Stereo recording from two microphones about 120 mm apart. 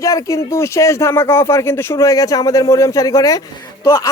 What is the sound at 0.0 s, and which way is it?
Speech, 25° left (ahead or behind).